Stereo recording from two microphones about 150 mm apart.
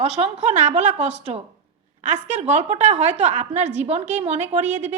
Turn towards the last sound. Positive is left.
turn(degrees=-50)  # may be behind; listen again after turning